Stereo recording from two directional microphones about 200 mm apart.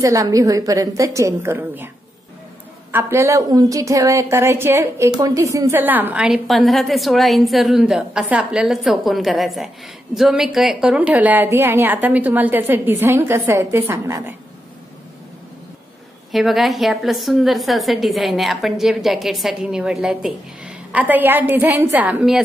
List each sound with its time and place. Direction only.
0.0 s a woman's voice: 15° right (ahead or behind)
2.9 s a woman's voice: 10° right (ahead or behind)
16.3 s a woman's voice: centre (ahead or behind)